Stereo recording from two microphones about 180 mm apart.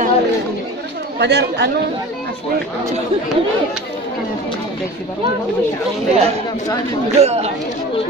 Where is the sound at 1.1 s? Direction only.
70° right (ahead or behind).